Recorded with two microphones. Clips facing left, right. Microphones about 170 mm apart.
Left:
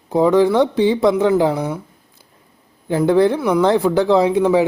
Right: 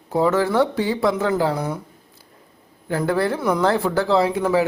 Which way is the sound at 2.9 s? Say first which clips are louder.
Left 7 dB; 20° left (ahead or behind).